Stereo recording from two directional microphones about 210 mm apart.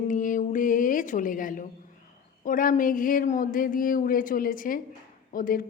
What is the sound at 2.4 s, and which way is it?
A woman's voice, 40° left (ahead or behind).